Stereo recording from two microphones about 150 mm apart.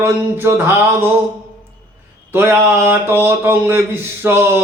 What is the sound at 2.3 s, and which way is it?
Speech, 15° right (ahead or behind).